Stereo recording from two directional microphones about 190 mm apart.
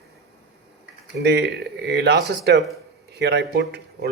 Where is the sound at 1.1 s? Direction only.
65° right (ahead or behind).